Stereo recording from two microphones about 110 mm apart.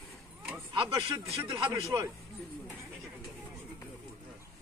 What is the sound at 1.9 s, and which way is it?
Speech, 30° right (ahead or behind).